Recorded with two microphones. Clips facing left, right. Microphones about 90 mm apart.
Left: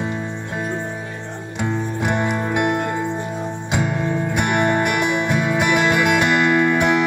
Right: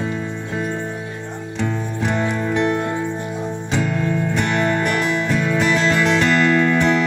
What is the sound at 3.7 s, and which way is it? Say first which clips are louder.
Music: even; 15° left (ahead or behind).